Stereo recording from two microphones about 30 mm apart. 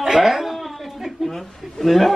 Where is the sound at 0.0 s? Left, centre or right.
Centre.